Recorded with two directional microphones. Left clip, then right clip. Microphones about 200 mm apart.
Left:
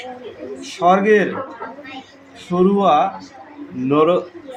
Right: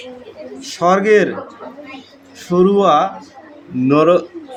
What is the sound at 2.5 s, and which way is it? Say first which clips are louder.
A man's voice: right 3 dB; 30° right (ahead or behind).